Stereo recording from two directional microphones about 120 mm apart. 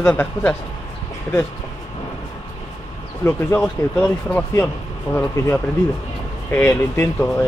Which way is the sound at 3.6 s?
10° left (ahead or behind).